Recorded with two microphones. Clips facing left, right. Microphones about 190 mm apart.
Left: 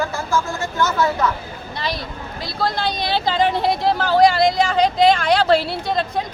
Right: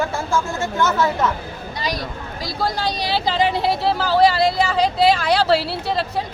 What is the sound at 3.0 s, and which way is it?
Speech, 10° right (ahead or behind).